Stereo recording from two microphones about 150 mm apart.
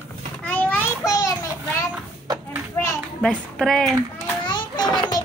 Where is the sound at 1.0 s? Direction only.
20° left (ahead or behind).